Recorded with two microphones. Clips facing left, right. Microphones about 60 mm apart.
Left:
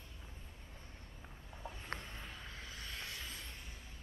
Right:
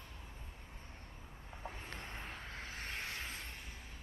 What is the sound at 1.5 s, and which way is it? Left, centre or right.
Vehicle, right.